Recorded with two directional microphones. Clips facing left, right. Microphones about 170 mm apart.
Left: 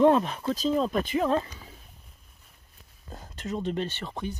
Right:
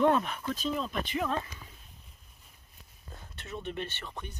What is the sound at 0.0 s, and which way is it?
Speech, 35° left (ahead or behind).